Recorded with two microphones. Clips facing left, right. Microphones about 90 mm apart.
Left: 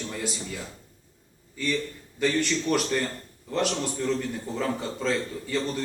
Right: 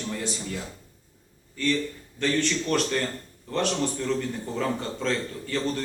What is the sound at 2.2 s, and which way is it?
A man's voice, 5° left (ahead or behind).